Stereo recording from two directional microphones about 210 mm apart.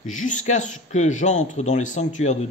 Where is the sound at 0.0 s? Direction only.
35° left (ahead or behind).